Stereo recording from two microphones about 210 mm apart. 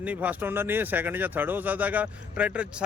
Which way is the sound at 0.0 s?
5° right (ahead or behind).